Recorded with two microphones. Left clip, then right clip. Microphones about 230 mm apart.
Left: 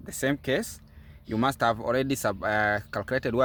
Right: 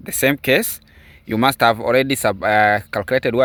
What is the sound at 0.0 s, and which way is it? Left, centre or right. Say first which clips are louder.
Speech: right 11 dB; right.